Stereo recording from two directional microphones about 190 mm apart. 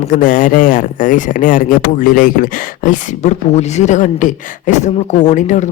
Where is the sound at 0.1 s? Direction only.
45° left (ahead or behind).